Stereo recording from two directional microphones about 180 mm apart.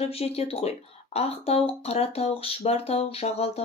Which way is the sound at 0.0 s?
35° left (ahead or behind).